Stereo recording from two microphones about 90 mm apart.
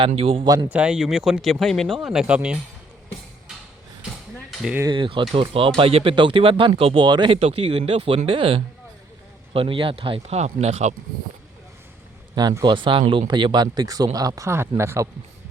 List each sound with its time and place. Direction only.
0.0 s speech: 90° right
0.4 s speech: 45° right (ahead or behind)
0.7 s speech: 15° right (ahead or behind); by 2.0 s 5° left (ahead or behind)
2.0 s speech: 5° right (ahead or behind)
4.9 s speech: 70° right (ahead or behind)
5.3 s speech: 90° right
12.3 s speech: 50° right (ahead or behind)
12.6 s speech: 70° right (ahead or behind); by 15.1 s 30° right (ahead or behind)